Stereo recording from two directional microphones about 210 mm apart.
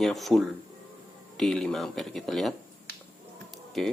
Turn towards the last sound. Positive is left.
turn(degrees=0)  # may be behind; listen again after turning